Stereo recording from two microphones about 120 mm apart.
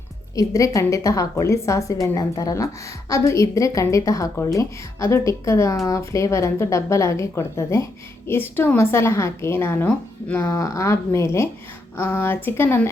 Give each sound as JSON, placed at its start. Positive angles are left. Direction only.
{"t": 0.3, "sound": "a woman's voice", "side_deg": 25}